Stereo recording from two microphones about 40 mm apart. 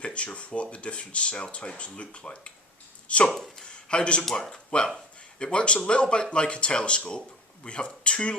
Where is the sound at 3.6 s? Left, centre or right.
Left.